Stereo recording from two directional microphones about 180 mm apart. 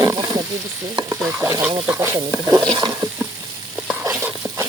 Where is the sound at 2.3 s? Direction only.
20° right (ahead or behind).